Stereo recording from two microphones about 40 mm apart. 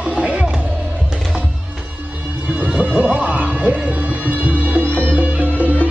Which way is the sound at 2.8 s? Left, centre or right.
Right.